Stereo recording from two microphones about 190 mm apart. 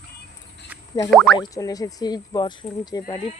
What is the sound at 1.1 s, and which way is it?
Speech, centre (ahead or behind).